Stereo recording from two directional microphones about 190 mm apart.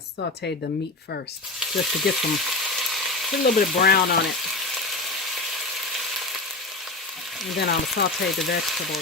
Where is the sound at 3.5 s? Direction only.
50° left (ahead or behind).